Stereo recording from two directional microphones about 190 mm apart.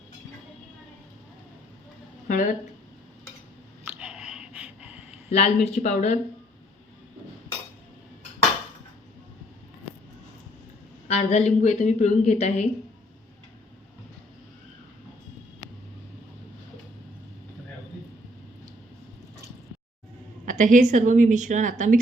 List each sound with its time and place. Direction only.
2.2 s speech: 40° left (ahead or behind)
4.0 s a sound: 5° right (ahead or behind)
5.3 s a woman's voice: 35° left (ahead or behind)
11.1 s a woman's voice: 35° left (ahead or behind)
20.4 s a woman's voice: 40° right (ahead or behind)